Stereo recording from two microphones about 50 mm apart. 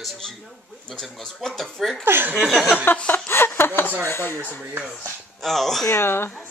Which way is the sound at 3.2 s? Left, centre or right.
Left.